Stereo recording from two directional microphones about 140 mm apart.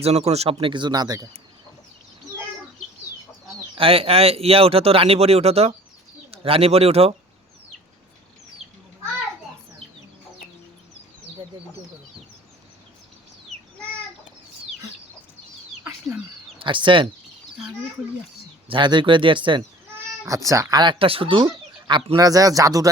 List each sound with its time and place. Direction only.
0.0 s speech: 50° right (ahead or behind); by 1.3 s 25° right (ahead or behind)
3.8 s speech: 40° right (ahead or behind)
16.6 s speech: 35° right (ahead or behind)
18.7 s speech: 35° right (ahead or behind)
20.2 s speech: 25° right (ahead or behind)